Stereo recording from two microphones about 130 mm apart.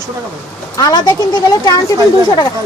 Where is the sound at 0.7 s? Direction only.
30° left (ahead or behind).